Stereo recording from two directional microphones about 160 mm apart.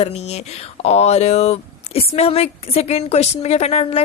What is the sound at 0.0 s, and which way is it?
Speech, 40° left (ahead or behind).